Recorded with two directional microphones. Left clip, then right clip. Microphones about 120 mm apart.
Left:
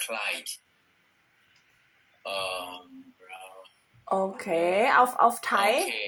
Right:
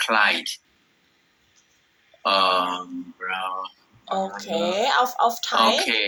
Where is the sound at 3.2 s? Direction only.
90° right.